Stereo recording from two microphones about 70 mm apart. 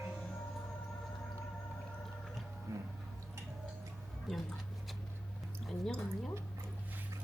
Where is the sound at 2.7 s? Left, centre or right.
Right.